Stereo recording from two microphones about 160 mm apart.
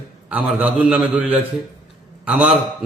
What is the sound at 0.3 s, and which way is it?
A man's voice, 10° right (ahead or behind).